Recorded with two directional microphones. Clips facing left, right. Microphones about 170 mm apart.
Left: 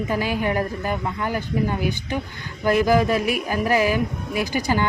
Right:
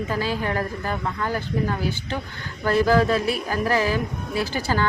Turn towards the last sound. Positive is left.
turn(degrees=15)  # may be behind; listen again after turning